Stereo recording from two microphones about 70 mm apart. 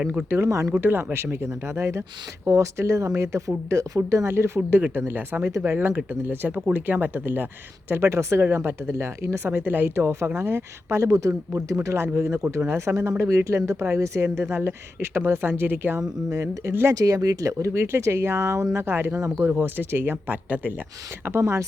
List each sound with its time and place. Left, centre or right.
0.3 s speech: right
0.7 s speech: right
4.8 s speech: right
5.5 s speech: right
5.7 s speech: right
16.0 s speech: right
19.5 s speech: right
21.2 s speech: right